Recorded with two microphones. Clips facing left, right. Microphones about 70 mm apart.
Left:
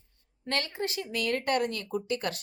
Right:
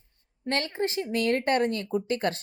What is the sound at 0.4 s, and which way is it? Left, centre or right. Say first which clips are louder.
Speech: right 4 dB; right.